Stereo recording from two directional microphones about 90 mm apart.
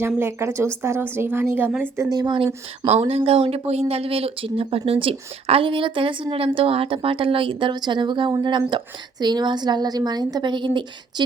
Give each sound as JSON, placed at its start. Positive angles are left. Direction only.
{"t": 0.2, "sound": "a woman's voice", "side_deg": -25}
{"t": 2.0, "sound": "a woman's voice", "side_deg": -45}
{"t": 3.2, "sound": "a woman's voice", "side_deg": -90}